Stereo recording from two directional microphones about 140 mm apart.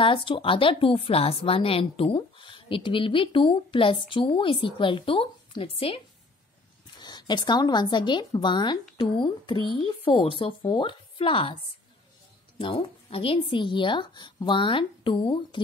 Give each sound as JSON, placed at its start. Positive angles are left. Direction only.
{"t": 0.0, "sound": "a woman's voice", "side_deg": 40}
{"t": 7.0, "sound": "a woman's voice", "side_deg": 30}